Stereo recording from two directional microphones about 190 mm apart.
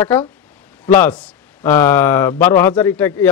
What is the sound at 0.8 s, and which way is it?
Speech, 10° left (ahead or behind).